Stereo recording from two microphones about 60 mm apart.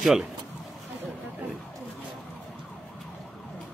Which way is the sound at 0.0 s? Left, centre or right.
Centre.